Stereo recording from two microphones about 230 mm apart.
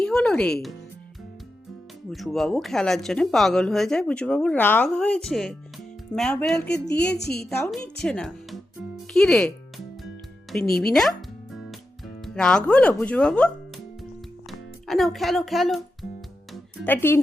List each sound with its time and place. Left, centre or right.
0.0 s speech: centre
2.0 s speech: centre
7.2 s a woman's voice: left
8.0 s speech: centre
9.1 s music: centre
10.8 s speech: centre
11.5 s music: centre
14.8 s a child's voice: centre
16.5 s music: centre